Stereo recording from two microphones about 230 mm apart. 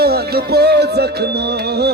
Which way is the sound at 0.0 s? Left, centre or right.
Right.